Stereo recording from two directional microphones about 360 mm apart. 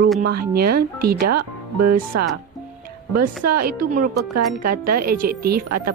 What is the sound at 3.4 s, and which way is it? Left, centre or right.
Speech, right.